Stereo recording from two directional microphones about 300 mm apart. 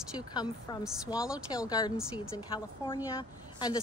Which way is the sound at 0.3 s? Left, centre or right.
Centre.